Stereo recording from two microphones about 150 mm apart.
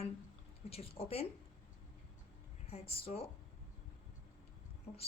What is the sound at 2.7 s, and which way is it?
Speech, 45° left (ahead or behind).